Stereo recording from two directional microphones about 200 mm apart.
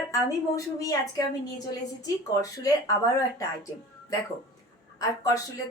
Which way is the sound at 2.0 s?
20° left (ahead or behind).